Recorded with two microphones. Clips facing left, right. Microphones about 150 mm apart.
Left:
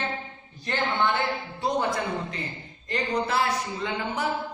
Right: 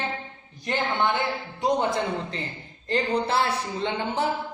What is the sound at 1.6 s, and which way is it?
A man's voice, 25° right (ahead or behind).